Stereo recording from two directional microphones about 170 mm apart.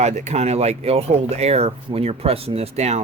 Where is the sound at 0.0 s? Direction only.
40° right (ahead or behind).